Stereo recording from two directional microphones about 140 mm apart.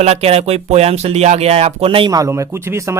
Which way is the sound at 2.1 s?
25° right (ahead or behind).